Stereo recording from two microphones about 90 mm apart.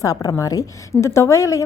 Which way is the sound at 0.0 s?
40° left (ahead or behind).